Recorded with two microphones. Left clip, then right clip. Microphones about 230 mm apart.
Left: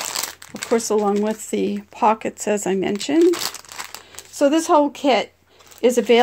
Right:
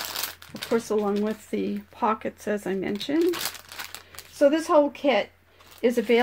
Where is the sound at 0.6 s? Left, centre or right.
Left.